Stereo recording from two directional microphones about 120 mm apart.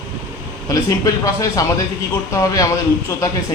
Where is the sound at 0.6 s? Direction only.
25° left (ahead or behind).